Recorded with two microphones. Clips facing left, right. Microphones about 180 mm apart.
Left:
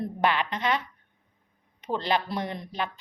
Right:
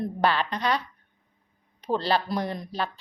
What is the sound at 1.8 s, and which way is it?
Speech, 35° right (ahead or behind).